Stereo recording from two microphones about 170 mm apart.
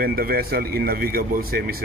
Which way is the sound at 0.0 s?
60° right (ahead or behind).